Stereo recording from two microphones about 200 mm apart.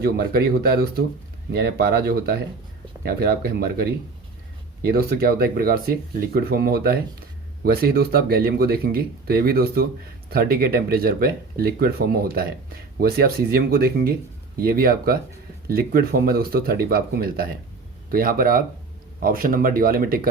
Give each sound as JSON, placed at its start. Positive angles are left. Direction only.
{"t": 0.0, "sound": "speech", "side_deg": -50}